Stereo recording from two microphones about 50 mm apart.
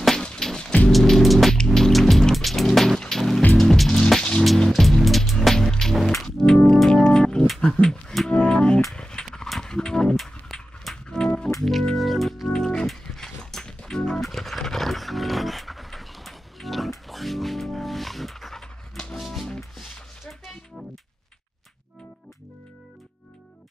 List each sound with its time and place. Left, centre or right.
0.4 s rain: centre
0.8 s music: centre
7.6 s a sound: centre
8.3 s music: left
8.9 s a sound: centre
9.6 s music: centre
10.1 s a sound: centre
11.1 s music: centre
11.6 s music: centre
17.1 s dog: centre
19.1 s music: centre